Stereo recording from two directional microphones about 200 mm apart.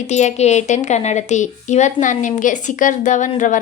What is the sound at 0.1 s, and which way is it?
A woman's voice, 35° left (ahead or behind).